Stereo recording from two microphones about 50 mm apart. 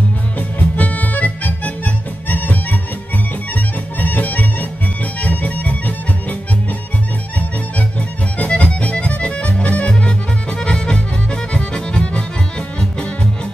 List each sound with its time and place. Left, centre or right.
0.4 s accordion: left
3.5 s music: left
8.4 s music: left